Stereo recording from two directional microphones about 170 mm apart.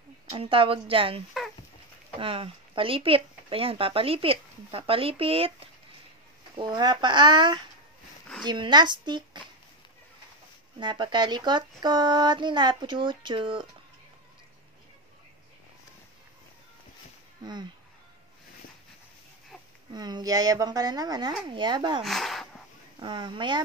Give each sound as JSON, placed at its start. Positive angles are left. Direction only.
{"t": 0.3, "sound": "speech", "side_deg": -35}
{"t": 10.8, "sound": "speech", "side_deg": -25}
{"t": 17.4, "sound": "speech", "side_deg": -25}
{"t": 19.9, "sound": "speech", "side_deg": -25}
{"t": 22.0, "sound": "speech", "side_deg": 0}
{"t": 22.9, "sound": "speech", "side_deg": -30}